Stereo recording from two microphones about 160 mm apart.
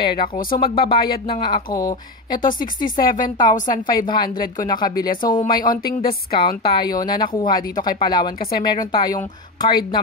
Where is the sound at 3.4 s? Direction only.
25° left (ahead or behind).